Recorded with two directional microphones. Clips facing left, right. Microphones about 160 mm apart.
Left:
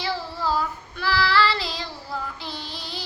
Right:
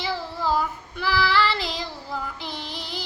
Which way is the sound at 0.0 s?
15° right (ahead or behind).